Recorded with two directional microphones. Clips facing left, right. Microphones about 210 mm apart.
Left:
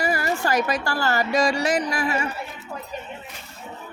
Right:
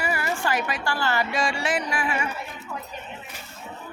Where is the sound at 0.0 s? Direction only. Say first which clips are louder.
Left 3 dB; 40° left (ahead or behind).